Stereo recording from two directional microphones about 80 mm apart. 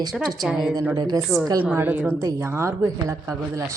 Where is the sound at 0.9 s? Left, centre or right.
Right.